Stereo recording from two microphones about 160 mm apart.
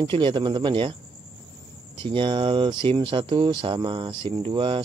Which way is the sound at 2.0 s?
30° right (ahead or behind).